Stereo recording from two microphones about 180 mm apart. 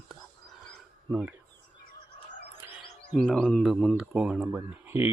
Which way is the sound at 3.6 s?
Centre (ahead or behind).